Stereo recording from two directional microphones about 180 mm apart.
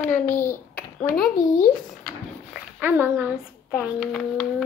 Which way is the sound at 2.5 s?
10° right (ahead or behind).